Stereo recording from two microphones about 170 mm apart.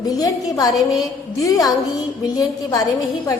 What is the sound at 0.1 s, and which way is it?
A woman's voice, 20° left (ahead or behind).